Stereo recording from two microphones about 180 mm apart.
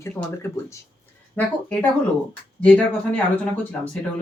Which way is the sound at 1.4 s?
10° left (ahead or behind).